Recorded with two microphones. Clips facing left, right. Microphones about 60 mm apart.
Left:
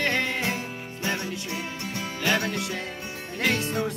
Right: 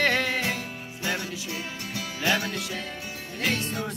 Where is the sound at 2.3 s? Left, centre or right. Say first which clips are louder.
Left 1 dB; left.